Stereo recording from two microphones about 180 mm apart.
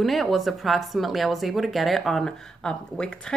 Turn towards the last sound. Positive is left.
turn(degrees=5)  # may be behind; listen again after turning